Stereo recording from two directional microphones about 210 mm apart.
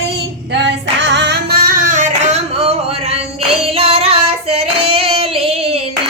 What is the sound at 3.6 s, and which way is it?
Child singing, 25° right (ahead or behind).